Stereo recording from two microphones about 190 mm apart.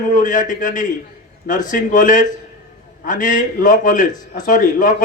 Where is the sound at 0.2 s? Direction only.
45° left (ahead or behind).